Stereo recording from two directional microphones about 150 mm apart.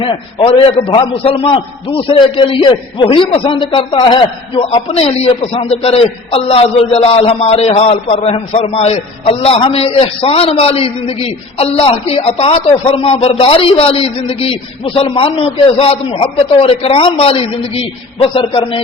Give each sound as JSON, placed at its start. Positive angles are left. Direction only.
{"t": 0.0, "sound": "a man's voice", "side_deg": 35}